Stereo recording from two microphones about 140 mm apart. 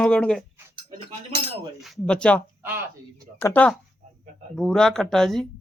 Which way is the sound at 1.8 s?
5° left (ahead or behind).